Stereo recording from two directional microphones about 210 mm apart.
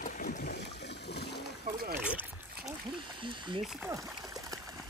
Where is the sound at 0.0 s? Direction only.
40° left (ahead or behind).